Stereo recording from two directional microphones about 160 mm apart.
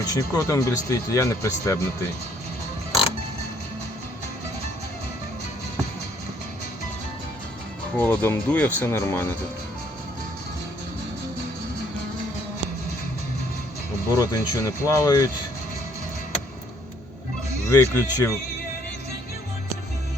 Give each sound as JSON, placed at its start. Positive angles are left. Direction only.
{"t": 0.1, "sound": "speech", "side_deg": 20}
{"t": 7.9, "sound": "speech", "side_deg": 10}
{"t": 14.2, "sound": "speech", "side_deg": 20}
{"t": 17.7, "sound": "speech", "side_deg": 20}